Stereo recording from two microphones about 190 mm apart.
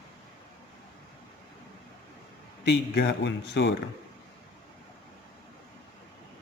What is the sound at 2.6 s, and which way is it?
Speech, 60° left (ahead or behind).